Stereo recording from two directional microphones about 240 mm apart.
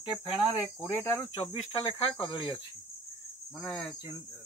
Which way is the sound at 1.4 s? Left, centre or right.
Left.